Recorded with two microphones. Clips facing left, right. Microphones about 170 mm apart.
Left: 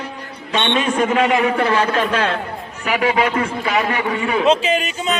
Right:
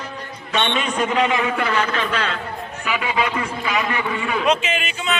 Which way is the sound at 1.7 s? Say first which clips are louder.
Left 4 dB; 30° left (ahead or behind).